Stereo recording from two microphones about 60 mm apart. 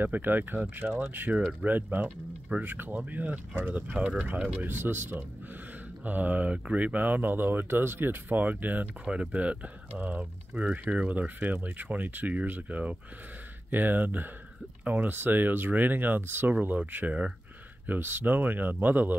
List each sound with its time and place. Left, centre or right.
0.0 s speech: right
6.0 s speech: right
9.0 s speech: centre